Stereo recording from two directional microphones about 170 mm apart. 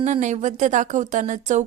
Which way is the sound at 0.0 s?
45° right (ahead or behind).